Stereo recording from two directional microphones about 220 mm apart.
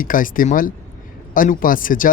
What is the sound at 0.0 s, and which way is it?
Speech, 40° left (ahead or behind).